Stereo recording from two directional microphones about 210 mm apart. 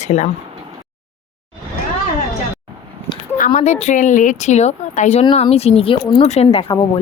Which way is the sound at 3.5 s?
30° left (ahead or behind).